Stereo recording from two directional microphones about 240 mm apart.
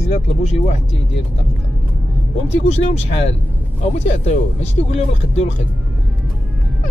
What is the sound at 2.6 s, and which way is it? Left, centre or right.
Speech, left.